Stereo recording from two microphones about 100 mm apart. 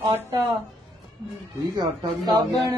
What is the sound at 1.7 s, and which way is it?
Speech, 45° right (ahead or behind).